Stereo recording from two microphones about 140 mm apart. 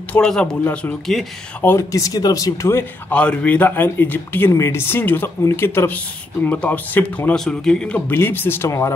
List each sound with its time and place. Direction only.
0.1 s speech: 5° left (ahead or behind)